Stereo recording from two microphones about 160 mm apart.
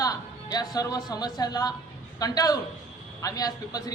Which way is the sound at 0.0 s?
25° left (ahead or behind).